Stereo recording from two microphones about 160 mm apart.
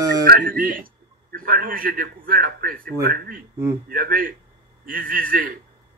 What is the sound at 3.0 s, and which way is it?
Speech, 75° right (ahead or behind).